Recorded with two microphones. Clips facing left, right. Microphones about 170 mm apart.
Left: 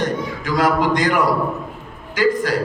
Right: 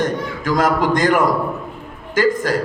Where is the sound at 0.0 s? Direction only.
45° right (ahead or behind).